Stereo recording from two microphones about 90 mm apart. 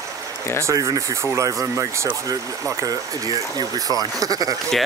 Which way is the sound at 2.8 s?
45° right (ahead or behind).